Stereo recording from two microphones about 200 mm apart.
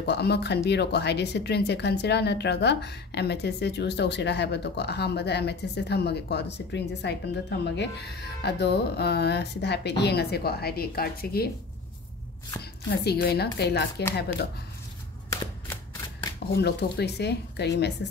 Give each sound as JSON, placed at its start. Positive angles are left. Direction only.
{"t": 0.0, "sound": "a woman's voice", "side_deg": 55}
{"t": 13.0, "sound": "a woman's voice", "side_deg": 55}
{"t": 16.5, "sound": "a woman's voice", "side_deg": 55}